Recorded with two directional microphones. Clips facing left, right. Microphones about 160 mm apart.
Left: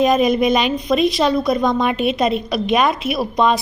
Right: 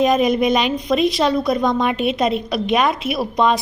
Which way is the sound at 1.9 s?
40° left (ahead or behind).